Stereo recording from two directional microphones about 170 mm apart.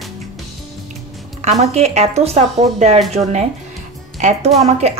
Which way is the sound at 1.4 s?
40° right (ahead or behind).